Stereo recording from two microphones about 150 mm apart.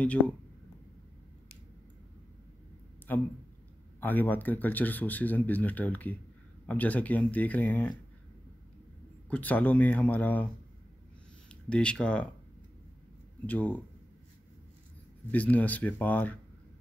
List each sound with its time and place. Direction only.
3.1 s speech: 10° left (ahead or behind)
9.3 s speech: 10° left (ahead or behind)
11.7 s speech: 5° left (ahead or behind)
13.5 s speech: 10° left (ahead or behind)
15.3 s speech: 10° left (ahead or behind)